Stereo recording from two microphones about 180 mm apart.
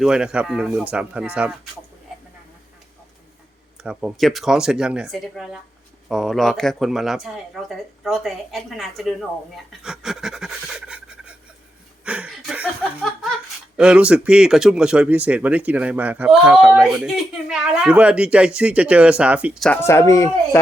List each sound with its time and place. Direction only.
0.0 s speech: 5° right (ahead or behind)
3.8 s speech: 5° right (ahead or behind)
9.8 s pant: 5° right (ahead or behind)
12.0 s laughter: 5° right (ahead or behind)
13.7 s speech: 5° right (ahead or behind)
19.6 s speech: 10° left (ahead or behind)